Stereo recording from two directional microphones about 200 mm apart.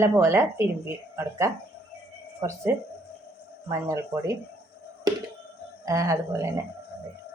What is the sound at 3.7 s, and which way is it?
Speech, 15° right (ahead or behind).